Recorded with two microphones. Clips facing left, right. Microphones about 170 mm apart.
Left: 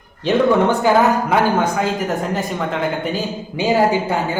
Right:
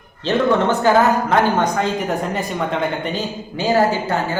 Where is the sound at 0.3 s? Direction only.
10° left (ahead or behind).